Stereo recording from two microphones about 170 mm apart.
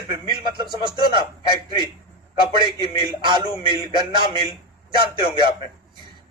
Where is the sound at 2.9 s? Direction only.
25° right (ahead or behind).